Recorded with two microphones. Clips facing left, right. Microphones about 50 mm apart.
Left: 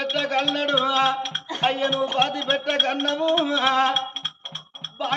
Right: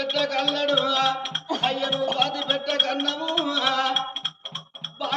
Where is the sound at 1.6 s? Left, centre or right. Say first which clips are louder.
Left 4 dB; left.